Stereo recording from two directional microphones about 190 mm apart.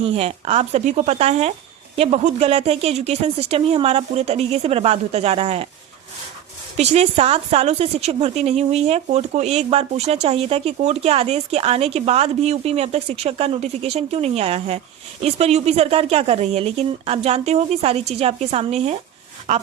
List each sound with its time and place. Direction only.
0.0 s a woman's voice: 30° right (ahead or behind)
6.7 s a woman's voice: 35° right (ahead or behind)